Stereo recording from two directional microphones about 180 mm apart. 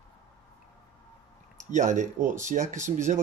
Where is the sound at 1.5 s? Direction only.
45° right (ahead or behind).